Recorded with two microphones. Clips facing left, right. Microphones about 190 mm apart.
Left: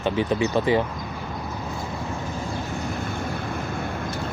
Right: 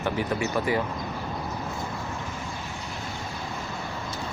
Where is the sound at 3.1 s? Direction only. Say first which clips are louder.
Left 6 dB; 55° left (ahead or behind).